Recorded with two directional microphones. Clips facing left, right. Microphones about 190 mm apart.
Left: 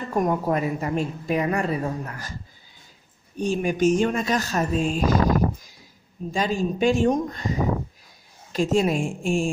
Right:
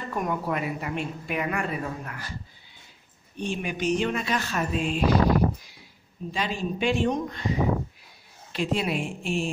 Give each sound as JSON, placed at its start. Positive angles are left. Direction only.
{"t": 0.1, "sound": "a woman's voice", "side_deg": 40}
{"t": 3.3, "sound": "speech", "side_deg": 45}